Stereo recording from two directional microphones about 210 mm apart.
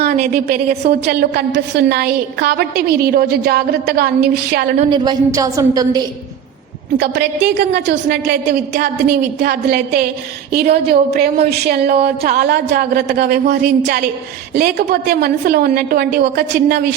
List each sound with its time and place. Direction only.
0.0 s a woman's voice: 45° right (ahead or behind)
4.8 s a woman's voice: 20° right (ahead or behind)
6.9 s a woman's voice: 55° right (ahead or behind)